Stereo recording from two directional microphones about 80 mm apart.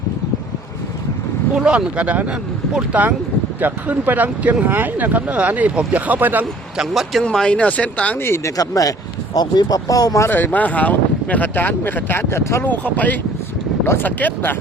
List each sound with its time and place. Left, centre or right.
1.5 s speech: centre
6.7 s speech: centre
7.3 s speech: centre
8.2 s speech: left
8.5 s speech: left
10.2 s speech: left
12.6 s speech: left
13.8 s speech: left
14.2 s speech: left